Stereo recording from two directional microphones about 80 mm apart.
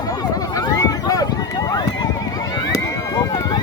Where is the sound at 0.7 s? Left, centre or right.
Left.